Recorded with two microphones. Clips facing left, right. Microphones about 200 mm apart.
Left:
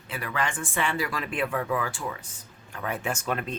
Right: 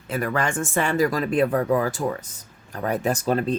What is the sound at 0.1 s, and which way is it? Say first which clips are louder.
Speech: right 7 dB; 45° right (ahead or behind).